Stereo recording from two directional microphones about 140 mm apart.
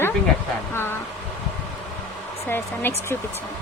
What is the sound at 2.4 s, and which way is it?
Speech, 15° left (ahead or behind).